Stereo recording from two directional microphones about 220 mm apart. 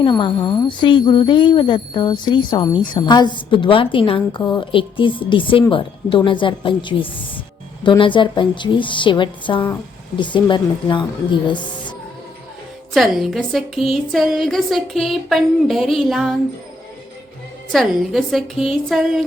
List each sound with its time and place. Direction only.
0.0 s a woman's voice: 20° left (ahead or behind)
12.9 s a woman's voice: centre (ahead or behind)
17.7 s a woman's voice: centre (ahead or behind)